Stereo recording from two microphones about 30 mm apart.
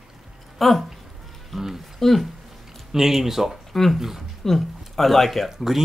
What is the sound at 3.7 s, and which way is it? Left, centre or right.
Speech, centre.